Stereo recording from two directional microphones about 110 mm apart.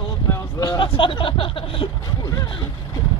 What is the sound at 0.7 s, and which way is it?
Speech, 50° left (ahead or behind).